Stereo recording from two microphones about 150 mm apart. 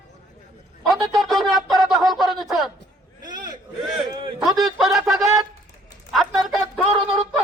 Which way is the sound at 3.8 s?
5° right (ahead or behind).